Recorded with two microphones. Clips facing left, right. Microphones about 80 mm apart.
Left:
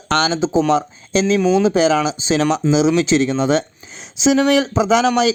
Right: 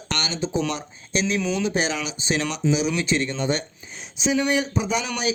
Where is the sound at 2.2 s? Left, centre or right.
Left.